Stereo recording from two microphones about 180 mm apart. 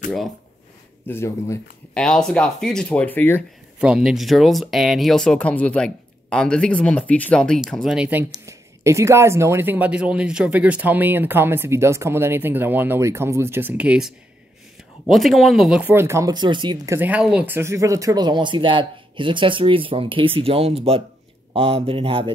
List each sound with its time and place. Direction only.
1.0 s speech: 15° left (ahead or behind)
3.8 s speech: 5° right (ahead or behind); by 16.9 s 25° right (ahead or behind)
16.9 s speech: 10° right (ahead or behind); by 22.3 s 30° right (ahead or behind)